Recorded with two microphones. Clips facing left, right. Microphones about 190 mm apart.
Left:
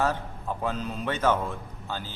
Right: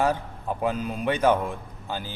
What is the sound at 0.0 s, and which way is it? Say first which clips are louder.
A man's voice: right 3 dB; 15° right (ahead or behind).